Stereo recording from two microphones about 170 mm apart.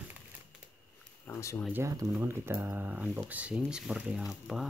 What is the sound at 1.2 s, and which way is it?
Speech, 15° left (ahead or behind).